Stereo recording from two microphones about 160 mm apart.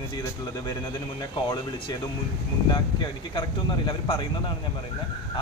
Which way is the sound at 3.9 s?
30° left (ahead or behind).